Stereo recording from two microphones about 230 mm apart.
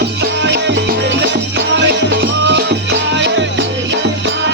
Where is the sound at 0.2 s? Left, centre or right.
Right.